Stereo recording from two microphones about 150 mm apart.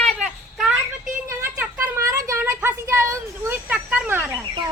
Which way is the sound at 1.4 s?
15° right (ahead or behind).